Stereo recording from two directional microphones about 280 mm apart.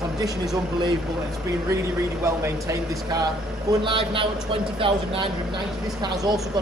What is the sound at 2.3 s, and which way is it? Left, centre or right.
Speech, centre.